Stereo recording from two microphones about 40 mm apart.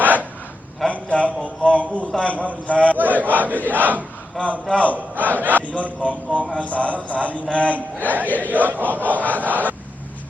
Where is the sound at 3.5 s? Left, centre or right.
Left.